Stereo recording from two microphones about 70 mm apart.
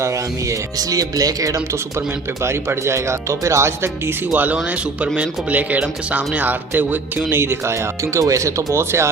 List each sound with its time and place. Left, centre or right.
0.0 s speech: right
0.8 s speech: right
2.4 s speech: right
4.3 s speech: right
4.5 s speech: centre; by 9.0 s right